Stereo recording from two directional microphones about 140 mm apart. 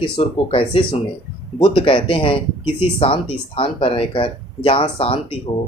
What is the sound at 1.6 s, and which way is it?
Speech, 40° left (ahead or behind).